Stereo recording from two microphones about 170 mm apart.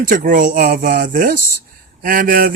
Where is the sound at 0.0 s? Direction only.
55° right (ahead or behind).